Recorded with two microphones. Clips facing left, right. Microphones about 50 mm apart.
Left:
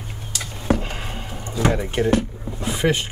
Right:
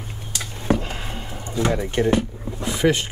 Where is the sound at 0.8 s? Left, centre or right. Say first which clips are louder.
Even; centre.